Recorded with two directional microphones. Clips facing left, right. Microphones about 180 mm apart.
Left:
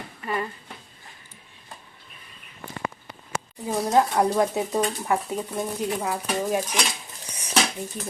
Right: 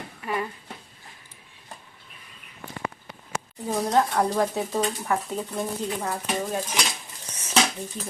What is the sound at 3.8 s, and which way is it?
Speech, 15° left (ahead or behind).